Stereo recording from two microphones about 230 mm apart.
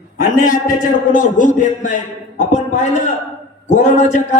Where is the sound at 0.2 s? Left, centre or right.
Left.